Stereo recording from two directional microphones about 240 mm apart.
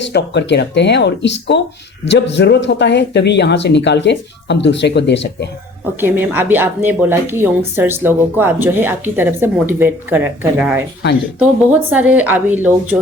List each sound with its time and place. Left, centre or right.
0.0 s speech: left
5.8 s a woman's voice: centre